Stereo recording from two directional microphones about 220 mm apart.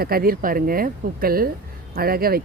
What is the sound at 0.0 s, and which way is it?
Speech, 40° right (ahead or behind).